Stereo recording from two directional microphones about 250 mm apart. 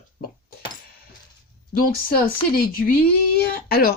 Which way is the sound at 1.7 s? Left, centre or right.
Left.